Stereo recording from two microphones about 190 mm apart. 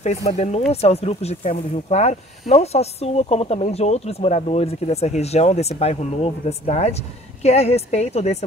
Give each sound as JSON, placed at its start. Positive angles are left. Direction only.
{"t": 0.0, "sound": "speech", "side_deg": 35}